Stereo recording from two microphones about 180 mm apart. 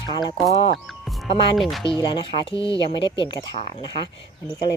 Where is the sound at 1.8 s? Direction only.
30° left (ahead or behind).